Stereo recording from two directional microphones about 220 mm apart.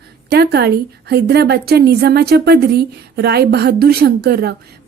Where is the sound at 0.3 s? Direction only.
50° right (ahead or behind).